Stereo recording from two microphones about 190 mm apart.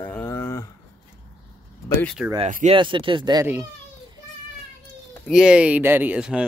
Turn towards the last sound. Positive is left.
turn(degrees=-5)  # may be behind; listen again after turning